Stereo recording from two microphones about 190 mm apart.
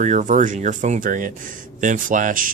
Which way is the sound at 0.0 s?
40° right (ahead or behind).